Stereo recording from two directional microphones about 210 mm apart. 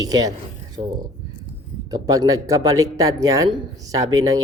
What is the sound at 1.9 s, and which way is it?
Speech, 20° right (ahead or behind).